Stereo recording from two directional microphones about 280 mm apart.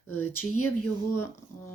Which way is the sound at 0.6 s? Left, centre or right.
Left.